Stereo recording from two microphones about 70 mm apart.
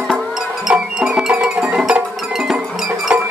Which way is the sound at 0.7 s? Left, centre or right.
Centre.